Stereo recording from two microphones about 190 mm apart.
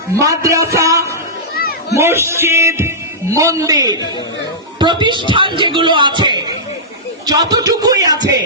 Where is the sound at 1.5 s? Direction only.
55° left (ahead or behind).